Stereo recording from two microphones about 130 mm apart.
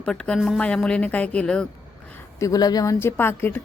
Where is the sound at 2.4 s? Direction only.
30° left (ahead or behind).